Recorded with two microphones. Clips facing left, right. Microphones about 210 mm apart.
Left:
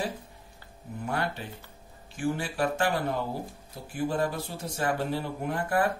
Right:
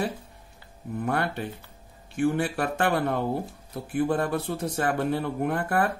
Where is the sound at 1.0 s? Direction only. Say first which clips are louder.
Right 4 dB; 60° right (ahead or behind).